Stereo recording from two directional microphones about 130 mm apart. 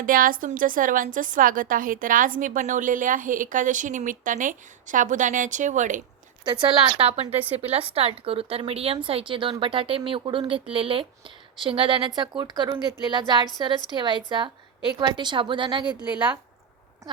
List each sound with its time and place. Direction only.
0.0 s a woman's voice: 90° right; by 6.0 s 70° right (ahead or behind)
6.4 s speech: 35° right (ahead or behind)
7.5 s a woman's voice: 50° right (ahead or behind); by 16.0 s 35° right (ahead or behind)
16.0 s a woman's voice: 10° right (ahead or behind)